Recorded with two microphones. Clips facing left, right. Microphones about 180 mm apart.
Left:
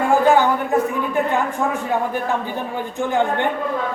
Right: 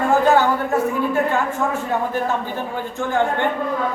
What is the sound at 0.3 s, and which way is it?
Speech, 15° left (ahead or behind).